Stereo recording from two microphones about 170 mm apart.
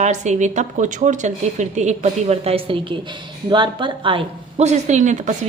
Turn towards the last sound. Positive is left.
turn(degrees=-45)  # may be behind; listen again after turning